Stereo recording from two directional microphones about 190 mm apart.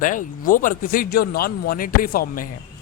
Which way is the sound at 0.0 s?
45° left (ahead or behind).